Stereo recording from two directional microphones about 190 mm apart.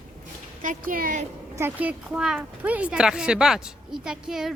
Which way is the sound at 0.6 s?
45° right (ahead or behind).